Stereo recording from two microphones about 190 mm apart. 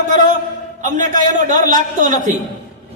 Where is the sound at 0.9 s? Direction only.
40° right (ahead or behind).